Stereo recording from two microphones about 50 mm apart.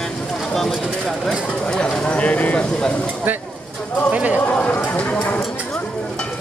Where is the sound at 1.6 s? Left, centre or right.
Left.